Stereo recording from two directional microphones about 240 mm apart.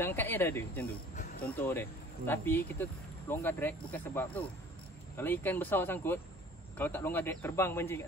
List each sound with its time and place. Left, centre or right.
0.0 s speech: centre
1.1 s a sound: left
1.5 s speech: centre